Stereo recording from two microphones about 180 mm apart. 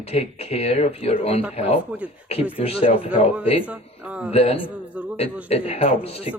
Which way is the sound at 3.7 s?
10° right (ahead or behind).